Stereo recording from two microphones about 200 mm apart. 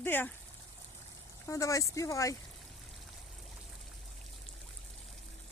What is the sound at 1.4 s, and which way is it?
Speech, 15° left (ahead or behind).